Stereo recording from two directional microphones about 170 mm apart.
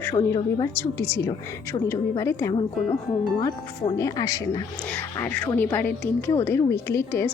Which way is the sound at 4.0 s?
20° left (ahead or behind).